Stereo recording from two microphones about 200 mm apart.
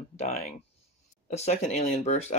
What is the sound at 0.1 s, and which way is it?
Speech, 35° left (ahead or behind).